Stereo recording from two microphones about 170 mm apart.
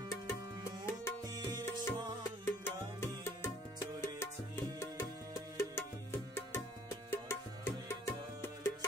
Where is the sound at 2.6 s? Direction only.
15° left (ahead or behind).